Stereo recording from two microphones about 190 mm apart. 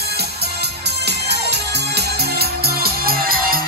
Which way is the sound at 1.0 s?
60° right (ahead or behind).